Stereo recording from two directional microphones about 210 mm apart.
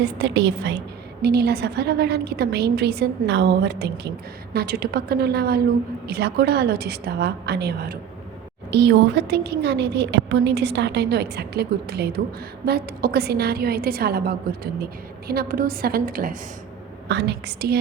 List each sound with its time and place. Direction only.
0.0 s a woman's voice: 55° right (ahead or behind)
17.1 s a woman's voice: 55° right (ahead or behind)